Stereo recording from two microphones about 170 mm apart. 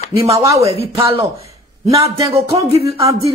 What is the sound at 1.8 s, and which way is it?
Speech, 20° right (ahead or behind).